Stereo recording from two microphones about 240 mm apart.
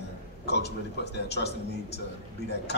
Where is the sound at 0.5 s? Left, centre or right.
Left.